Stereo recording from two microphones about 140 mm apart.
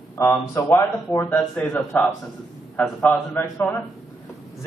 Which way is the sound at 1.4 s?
5° left (ahead or behind).